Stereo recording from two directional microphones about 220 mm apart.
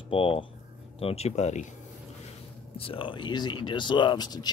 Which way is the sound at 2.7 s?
25° left (ahead or behind).